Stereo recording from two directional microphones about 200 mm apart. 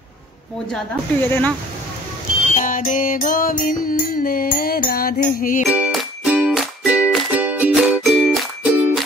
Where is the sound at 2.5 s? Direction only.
40° left (ahead or behind).